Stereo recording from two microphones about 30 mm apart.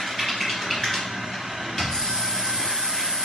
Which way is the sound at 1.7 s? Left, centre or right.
Centre.